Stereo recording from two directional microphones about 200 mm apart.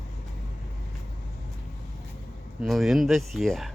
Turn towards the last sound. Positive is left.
turn(degrees=0)  # may be behind; listen again after turning